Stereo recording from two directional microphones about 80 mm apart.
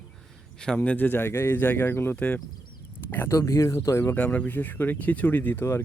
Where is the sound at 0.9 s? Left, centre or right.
Left.